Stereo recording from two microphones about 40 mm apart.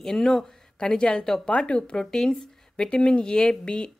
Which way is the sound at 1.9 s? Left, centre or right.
Centre.